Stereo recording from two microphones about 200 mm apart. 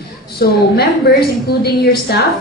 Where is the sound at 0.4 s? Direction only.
50° left (ahead or behind).